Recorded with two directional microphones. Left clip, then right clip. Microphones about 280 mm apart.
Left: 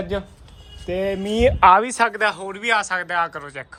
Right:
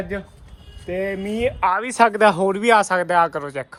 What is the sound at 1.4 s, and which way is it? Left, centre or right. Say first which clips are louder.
Speech: left 7 dB; left.